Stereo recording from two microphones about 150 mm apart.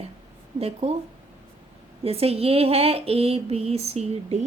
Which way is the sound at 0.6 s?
45° right (ahead or behind).